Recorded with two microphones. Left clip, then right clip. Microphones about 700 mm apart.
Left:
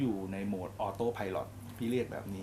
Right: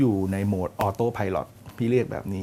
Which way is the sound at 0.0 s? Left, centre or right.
Right.